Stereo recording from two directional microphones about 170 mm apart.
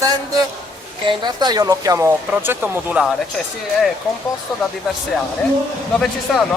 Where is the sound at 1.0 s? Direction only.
25° right (ahead or behind); by 3.1 s 10° right (ahead or behind).